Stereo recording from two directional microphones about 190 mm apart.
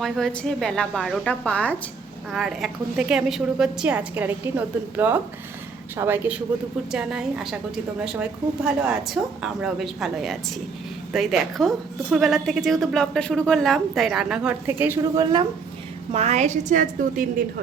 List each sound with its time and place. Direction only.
0.0 s a woman's voice: centre (ahead or behind)
15.2 s a woman's voice: 20° right (ahead or behind)
16.1 s a woman's voice: 35° right (ahead or behind)